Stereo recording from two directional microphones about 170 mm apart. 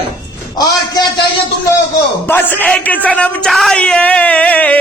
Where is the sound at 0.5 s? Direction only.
25° left (ahead or behind).